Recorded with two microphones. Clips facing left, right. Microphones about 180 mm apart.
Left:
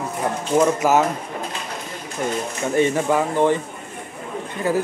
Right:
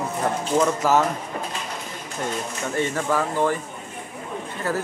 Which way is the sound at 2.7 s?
15° left (ahead or behind).